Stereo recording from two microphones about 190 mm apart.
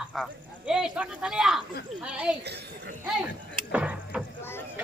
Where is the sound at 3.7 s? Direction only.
5° right (ahead or behind).